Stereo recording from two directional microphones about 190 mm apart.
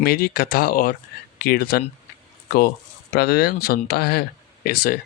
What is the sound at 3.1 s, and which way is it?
Speech, 55° left (ahead or behind).